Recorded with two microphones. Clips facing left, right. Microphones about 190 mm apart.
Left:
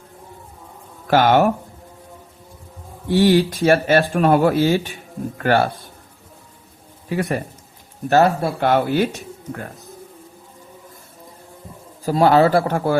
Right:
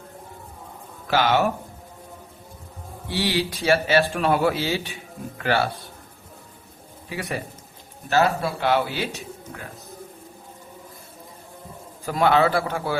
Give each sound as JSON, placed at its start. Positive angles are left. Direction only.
{"t": 1.1, "sound": "speech", "side_deg": 50}
{"t": 3.1, "sound": "speech", "side_deg": 45}
{"t": 7.1, "sound": "speech", "side_deg": 50}
{"t": 12.0, "sound": "a man's voice", "side_deg": 35}